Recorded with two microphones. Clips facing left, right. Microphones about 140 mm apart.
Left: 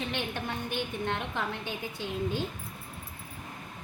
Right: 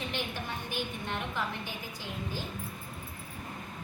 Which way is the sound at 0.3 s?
60° left (ahead or behind).